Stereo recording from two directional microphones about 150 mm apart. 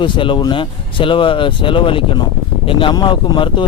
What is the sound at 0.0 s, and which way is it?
Speech, 35° left (ahead or behind).